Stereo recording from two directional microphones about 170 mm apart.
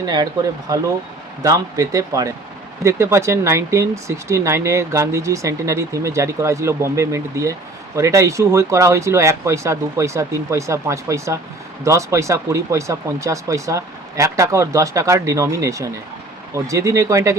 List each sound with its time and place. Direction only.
0.7 s speech: 20° right (ahead or behind)